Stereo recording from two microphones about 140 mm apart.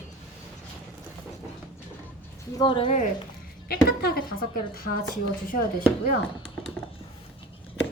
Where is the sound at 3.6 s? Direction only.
90° left.